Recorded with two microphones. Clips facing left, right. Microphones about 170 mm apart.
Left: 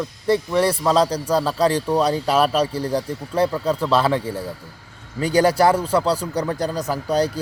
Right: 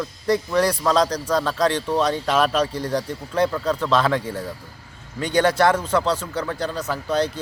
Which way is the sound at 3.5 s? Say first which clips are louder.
Left 1 dB; 10° left (ahead or behind).